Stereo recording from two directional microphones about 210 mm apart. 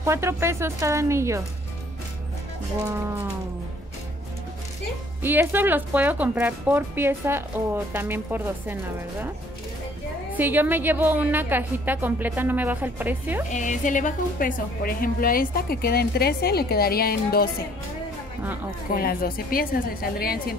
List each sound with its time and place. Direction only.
0.0 s speech: 10° right (ahead or behind)
5.2 s speech: 10° right (ahead or behind)
10.3 s speech: 10° right (ahead or behind)
13.5 s a woman's voice: 35° left (ahead or behind)
18.9 s a woman's voice: 45° left (ahead or behind)